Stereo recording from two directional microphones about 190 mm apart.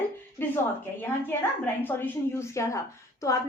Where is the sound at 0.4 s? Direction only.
10° left (ahead or behind).